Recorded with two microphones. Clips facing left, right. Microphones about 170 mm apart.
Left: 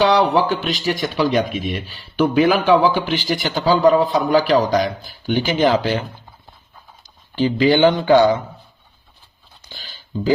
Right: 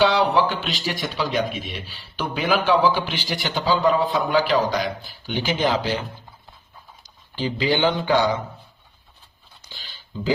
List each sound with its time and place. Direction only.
0.0 s speech: 40° left (ahead or behind)
7.3 s speech: 50° left (ahead or behind)
9.6 s a sound: 45° left (ahead or behind)